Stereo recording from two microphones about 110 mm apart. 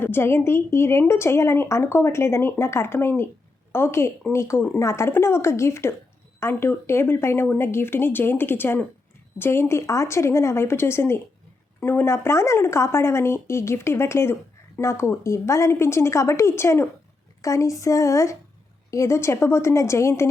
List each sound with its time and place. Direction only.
0.0 s a woman's voice: 20° left (ahead or behind)